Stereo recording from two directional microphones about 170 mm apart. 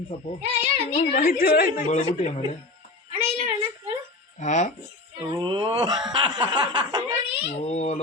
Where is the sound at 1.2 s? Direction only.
60° left (ahead or behind).